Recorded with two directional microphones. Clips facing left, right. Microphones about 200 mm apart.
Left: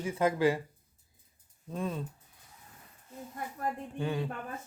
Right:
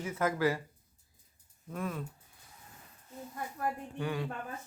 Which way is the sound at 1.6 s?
25° left (ahead or behind).